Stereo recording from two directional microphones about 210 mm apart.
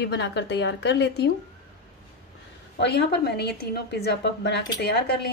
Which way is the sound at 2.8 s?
55° left (ahead or behind).